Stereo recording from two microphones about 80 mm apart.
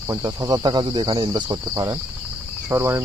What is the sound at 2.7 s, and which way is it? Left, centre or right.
Cricket, right.